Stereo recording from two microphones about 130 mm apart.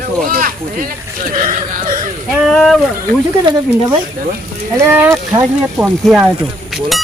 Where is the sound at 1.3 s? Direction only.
90° right.